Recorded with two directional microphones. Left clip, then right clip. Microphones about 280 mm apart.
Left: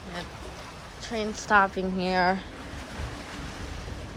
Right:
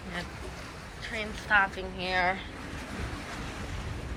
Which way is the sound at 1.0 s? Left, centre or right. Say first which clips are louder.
Left 3 dB; centre.